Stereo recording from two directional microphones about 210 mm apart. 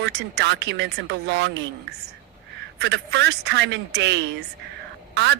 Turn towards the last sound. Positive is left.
turn(degrees=-55)  # may be behind; listen again after turning